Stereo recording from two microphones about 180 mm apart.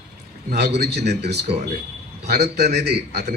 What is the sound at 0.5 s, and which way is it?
A man's voice, 65° right (ahead or behind).